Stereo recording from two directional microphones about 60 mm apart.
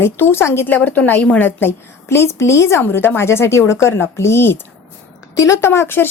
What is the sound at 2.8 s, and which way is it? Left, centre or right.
A woman's voice, left.